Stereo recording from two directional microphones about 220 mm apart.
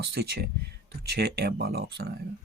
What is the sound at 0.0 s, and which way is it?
Speech, 50° right (ahead or behind).